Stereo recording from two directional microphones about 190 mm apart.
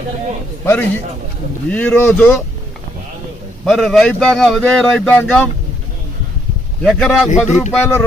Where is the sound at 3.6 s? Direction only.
Centre (ahead or behind).